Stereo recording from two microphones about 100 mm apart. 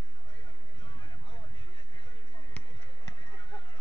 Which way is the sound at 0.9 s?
65° left (ahead or behind).